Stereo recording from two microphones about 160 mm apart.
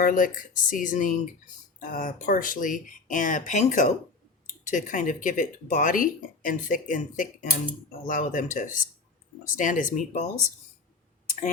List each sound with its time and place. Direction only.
0.0 s speech: 60° left (ahead or behind)